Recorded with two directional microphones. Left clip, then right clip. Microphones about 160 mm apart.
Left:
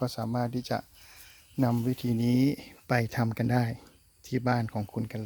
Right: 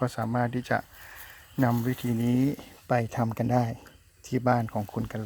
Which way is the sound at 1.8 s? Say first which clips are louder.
Right 1 dB; 40° left (ahead or behind).